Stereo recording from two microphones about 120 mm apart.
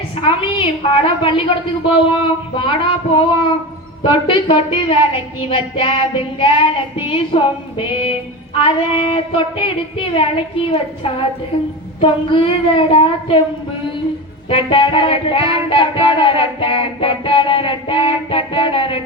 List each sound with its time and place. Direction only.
0.2 s child singing: 50° left (ahead or behind)
2.6 s child singing: 45° left (ahead or behind)
14.5 s child singing: 45° left (ahead or behind)